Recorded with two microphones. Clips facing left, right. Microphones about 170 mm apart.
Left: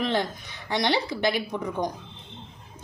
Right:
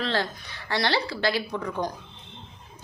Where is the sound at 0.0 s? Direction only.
15° left (ahead or behind).